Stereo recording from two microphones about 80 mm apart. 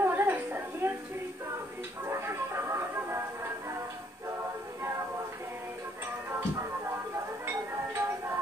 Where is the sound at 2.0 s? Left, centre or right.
Right.